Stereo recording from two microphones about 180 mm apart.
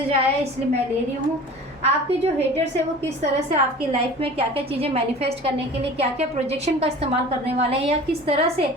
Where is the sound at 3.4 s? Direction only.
30° right (ahead or behind).